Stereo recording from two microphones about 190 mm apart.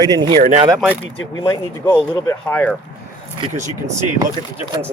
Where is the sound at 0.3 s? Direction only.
40° right (ahead or behind).